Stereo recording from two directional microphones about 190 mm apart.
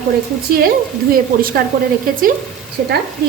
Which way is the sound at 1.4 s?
50° right (ahead or behind).